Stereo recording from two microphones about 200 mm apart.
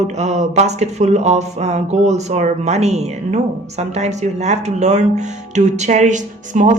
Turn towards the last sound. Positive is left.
turn(degrees=-40)  # may be behind; listen again after turning